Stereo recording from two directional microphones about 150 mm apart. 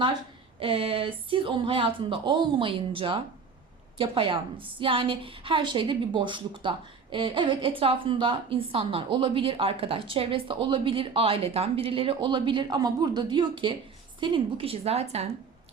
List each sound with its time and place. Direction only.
0.6 s a woman's voice: 40° right (ahead or behind)